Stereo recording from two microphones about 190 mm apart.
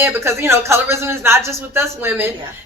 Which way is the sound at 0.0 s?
15° right (ahead or behind).